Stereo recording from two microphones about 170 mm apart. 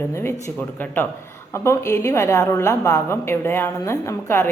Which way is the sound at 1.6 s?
15° left (ahead or behind).